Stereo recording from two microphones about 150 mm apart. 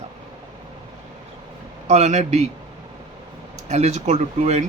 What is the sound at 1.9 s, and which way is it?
Speech, 50° right (ahead or behind).